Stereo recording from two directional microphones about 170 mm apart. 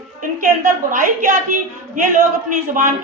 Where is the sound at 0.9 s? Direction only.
50° right (ahead or behind).